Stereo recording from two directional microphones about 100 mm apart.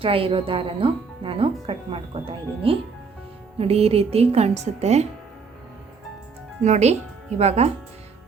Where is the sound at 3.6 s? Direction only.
85° right.